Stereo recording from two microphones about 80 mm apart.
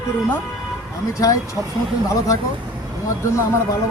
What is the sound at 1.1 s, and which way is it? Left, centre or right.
Speech, left.